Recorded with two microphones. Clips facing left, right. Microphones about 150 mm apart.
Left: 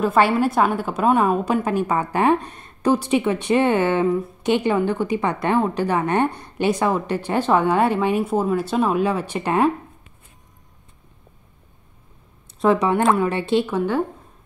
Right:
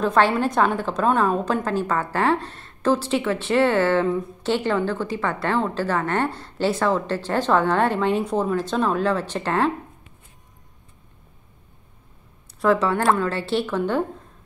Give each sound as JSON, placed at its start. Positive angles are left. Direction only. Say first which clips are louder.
{"t": 0.0, "sound": "a woman's voice", "louder": "left 2 dB", "side_deg": 5}
{"t": 12.5, "sound": "a woman's voice", "louder": "left 2 dB", "side_deg": 20}